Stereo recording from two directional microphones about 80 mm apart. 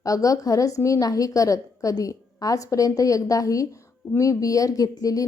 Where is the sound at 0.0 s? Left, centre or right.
Left.